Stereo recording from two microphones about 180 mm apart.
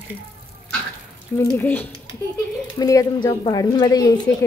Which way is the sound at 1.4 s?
15° left (ahead or behind).